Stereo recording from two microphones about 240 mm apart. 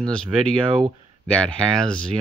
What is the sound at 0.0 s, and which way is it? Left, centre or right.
Speech, centre.